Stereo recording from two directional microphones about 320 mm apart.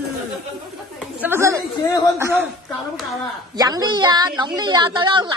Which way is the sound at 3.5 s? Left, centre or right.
Centre.